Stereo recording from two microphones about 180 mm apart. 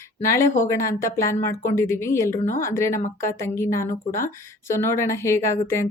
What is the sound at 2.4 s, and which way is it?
Speech, 50° left (ahead or behind).